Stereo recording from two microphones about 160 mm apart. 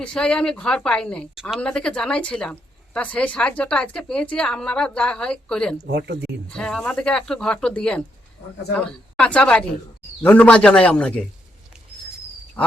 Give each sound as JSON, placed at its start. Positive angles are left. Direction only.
{"t": 0.0, "sound": "speech", "side_deg": 5}
{"t": 5.8, "sound": "speech", "side_deg": -90}
{"t": 6.5, "sound": "a man's voice", "side_deg": 5}
{"t": 12.6, "sound": "frog", "side_deg": 10}